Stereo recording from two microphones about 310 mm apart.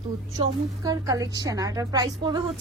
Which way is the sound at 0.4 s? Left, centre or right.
Centre.